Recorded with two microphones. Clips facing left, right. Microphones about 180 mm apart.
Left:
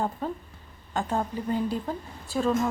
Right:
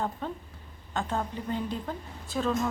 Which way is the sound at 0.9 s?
10° left (ahead or behind).